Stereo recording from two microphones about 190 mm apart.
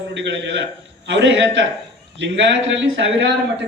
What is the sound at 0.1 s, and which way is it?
A man's voice, 70° right (ahead or behind).